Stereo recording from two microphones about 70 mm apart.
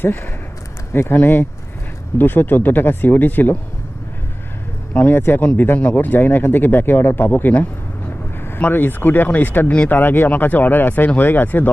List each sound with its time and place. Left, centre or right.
0.0 s speech: left
4.9 s speech: left